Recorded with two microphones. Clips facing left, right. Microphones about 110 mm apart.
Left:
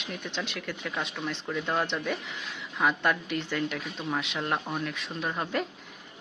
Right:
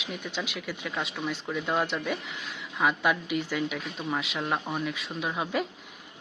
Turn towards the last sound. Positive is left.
turn(degrees=-5)  # may be behind; listen again after turning